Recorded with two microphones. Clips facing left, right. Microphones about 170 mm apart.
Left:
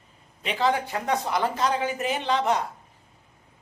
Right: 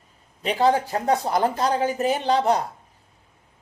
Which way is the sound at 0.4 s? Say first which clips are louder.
Right 5 dB; 40° right (ahead or behind).